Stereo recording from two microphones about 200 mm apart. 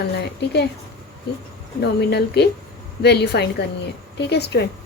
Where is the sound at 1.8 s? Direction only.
55° left (ahead or behind).